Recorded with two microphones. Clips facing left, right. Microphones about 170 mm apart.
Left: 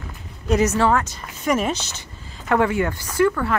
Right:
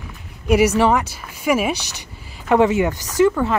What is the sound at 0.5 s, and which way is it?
A woman's voice, 10° right (ahead or behind).